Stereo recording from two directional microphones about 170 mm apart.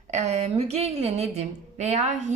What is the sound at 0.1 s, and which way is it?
A woman's voice, 40° right (ahead or behind).